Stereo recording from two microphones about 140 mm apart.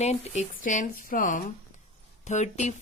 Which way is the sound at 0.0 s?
55° left (ahead or behind).